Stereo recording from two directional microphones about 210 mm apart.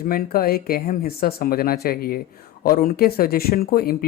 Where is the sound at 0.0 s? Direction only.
45° left (ahead or behind).